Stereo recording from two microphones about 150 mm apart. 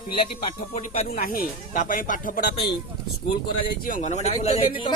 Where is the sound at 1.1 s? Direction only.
70° left (ahead or behind).